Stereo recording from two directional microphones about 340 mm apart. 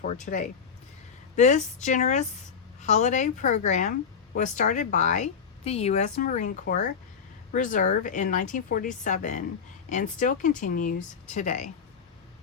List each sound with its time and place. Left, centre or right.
0.3 s speech: left